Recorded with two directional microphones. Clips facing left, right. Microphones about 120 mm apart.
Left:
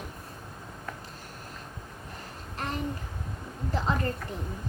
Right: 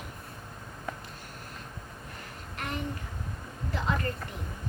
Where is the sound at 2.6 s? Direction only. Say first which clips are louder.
Left 2 dB; 35° left (ahead or behind).